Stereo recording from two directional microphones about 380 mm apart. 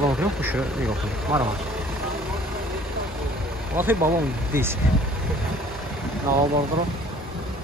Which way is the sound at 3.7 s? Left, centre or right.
Centre.